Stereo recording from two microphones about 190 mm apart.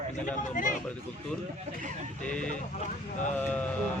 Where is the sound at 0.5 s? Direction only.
45° left (ahead or behind).